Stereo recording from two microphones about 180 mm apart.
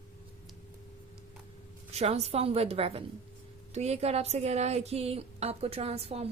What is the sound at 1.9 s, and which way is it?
A woman's voice, 35° right (ahead or behind).